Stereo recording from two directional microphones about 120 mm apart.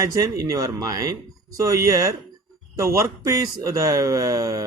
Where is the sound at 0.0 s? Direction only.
30° right (ahead or behind).